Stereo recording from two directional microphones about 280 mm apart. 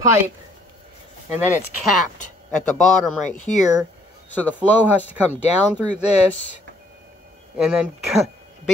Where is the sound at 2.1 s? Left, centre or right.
Left.